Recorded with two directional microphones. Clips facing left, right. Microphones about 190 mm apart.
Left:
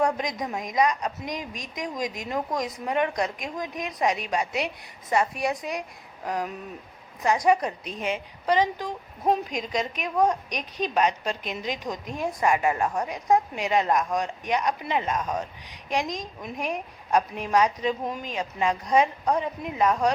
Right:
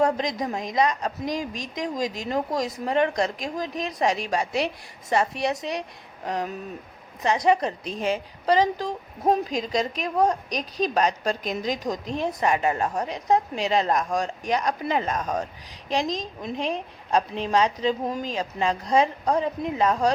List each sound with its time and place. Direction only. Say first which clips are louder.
0.1 s a woman's voice: right 3 dB; 30° right (ahead or behind)